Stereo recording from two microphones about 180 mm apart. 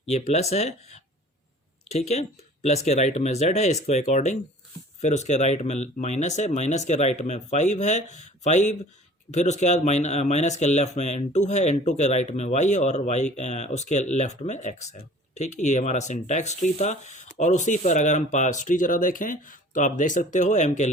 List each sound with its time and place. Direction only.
0.0 s speech: 35° left (ahead or behind)